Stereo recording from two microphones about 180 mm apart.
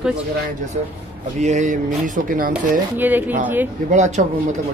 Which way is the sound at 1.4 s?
40° right (ahead or behind).